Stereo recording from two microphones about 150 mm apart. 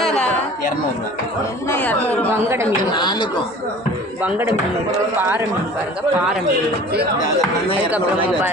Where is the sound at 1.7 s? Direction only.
10° left (ahead or behind).